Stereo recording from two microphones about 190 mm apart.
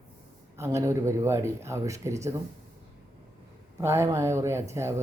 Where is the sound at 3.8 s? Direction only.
15° right (ahead or behind).